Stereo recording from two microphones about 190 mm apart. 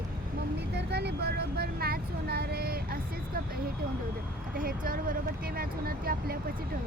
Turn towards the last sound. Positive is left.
turn(degrees=-50)  # may be behind; listen again after turning